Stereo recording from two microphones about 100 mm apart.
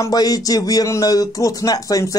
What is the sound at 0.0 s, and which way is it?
A man's voice, 40° left (ahead or behind).